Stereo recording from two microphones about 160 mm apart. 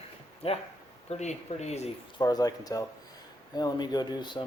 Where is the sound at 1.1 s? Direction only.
45° left (ahead or behind).